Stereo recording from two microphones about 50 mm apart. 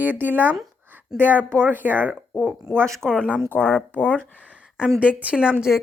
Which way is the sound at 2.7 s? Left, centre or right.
Right.